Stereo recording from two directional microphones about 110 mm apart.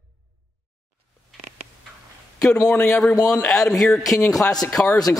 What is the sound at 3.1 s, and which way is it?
Speech, 35° left (ahead or behind).